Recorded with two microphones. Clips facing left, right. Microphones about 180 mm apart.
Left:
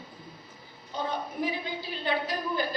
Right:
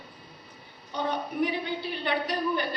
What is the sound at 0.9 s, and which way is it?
A woman's voice, 65° right (ahead or behind).